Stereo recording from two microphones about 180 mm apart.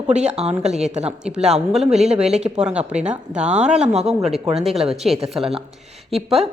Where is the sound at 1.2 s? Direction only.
5° right (ahead or behind).